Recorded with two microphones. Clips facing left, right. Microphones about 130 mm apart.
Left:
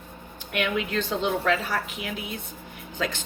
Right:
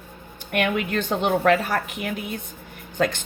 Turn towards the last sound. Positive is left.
turn(degrees=-50)  # may be behind; listen again after turning